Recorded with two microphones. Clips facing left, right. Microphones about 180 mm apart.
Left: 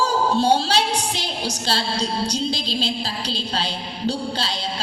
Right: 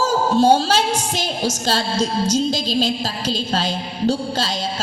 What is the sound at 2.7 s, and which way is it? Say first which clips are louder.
A woman's voice: right 5 dB; 45° right (ahead or behind).